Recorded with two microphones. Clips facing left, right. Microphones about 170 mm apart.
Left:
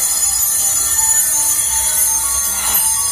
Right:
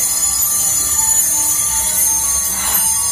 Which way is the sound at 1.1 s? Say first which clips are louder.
Right 1 dB; 20° right (ahead or behind).